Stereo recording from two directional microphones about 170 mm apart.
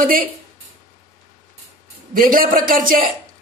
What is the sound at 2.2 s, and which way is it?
Speech, 55° right (ahead or behind).